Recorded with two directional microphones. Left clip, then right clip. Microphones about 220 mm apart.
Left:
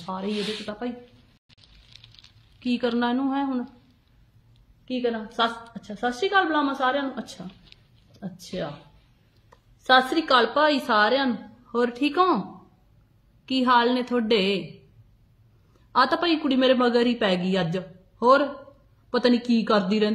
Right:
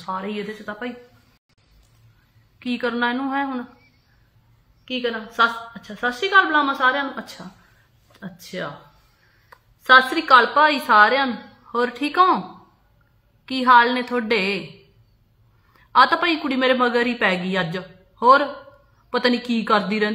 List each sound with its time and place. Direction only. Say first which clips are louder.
0.0 s a woman's voice: right 2 dB; 15° right (ahead or behind)
2.6 s a woman's voice: right 3 dB; 15° right (ahead or behind)
4.8 s a woman's voice: right 2 dB; 15° right (ahead or behind)
13.5 s a woman's voice: right 6 dB; 15° right (ahead or behind)
15.9 s a woman's voice: right 5 dB; 15° right (ahead or behind)